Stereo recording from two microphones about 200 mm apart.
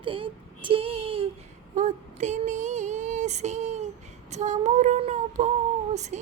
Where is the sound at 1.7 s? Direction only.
35° right (ahead or behind).